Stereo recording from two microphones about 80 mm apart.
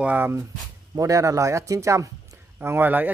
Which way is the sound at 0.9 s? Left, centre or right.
Right.